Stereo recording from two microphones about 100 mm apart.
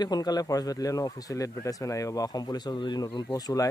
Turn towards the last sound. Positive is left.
turn(degrees=25)  # may be behind; listen again after turning